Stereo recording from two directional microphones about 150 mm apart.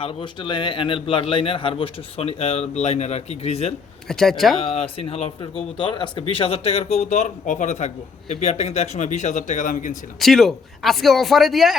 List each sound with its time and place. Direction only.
0.0 s speech: 35° left (ahead or behind)
4.1 s speech: 5° left (ahead or behind)
4.6 s speech: 40° left (ahead or behind); by 10.0 s 60° left (ahead or behind)
10.2 s speech: centre (ahead or behind)